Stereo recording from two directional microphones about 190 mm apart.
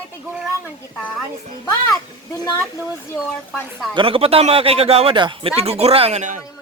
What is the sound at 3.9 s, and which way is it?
Speech, 30° right (ahead or behind).